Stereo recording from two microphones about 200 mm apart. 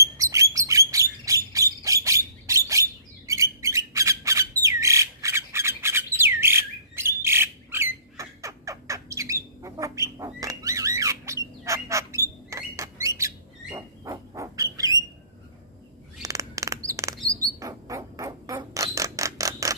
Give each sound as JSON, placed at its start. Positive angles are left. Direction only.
{"t": 0.0, "sound": "bird", "side_deg": -15}
{"t": 7.2, "sound": "squawk", "side_deg": -10}
{"t": 16.2, "sound": "chirp", "side_deg": -15}
{"t": 17.4, "sound": "a sound", "side_deg": -15}